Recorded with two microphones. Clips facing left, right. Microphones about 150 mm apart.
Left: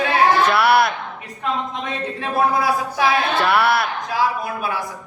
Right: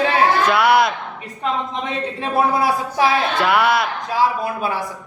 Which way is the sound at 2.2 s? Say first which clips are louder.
Right 1 dB; 25° right (ahead or behind).